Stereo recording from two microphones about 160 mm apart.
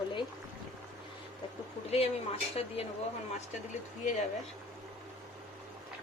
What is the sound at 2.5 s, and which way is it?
Speech, 40° left (ahead or behind).